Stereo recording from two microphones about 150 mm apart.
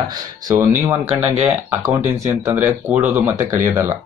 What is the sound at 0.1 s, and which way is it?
Speech, 25° right (ahead or behind).